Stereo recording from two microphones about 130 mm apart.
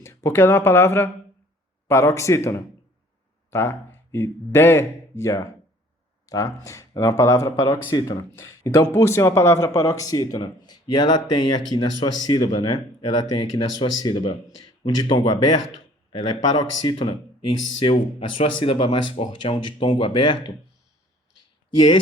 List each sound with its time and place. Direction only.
0.0 s speech: 20° left (ahead or behind); by 20.5 s 40° left (ahead or behind)